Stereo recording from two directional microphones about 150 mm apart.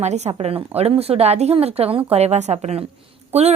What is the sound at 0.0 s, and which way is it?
A woman's voice, 45° right (ahead or behind).